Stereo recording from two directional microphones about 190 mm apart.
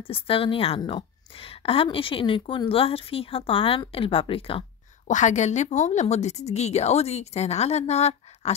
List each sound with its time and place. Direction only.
0.1 s a woman's voice: 30° left (ahead or behind)
5.0 s a woman's voice: 40° left (ahead or behind)